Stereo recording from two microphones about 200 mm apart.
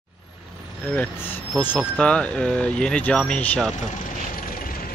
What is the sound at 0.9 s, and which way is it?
Speech, 10° left (ahead or behind).